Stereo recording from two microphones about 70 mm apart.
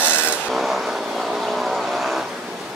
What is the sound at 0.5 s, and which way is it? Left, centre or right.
Vehicle, centre.